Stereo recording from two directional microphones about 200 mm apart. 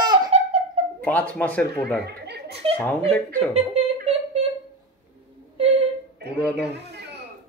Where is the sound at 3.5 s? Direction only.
35° right (ahead or behind).